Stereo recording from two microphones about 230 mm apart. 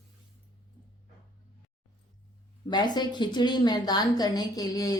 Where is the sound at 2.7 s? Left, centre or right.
Centre.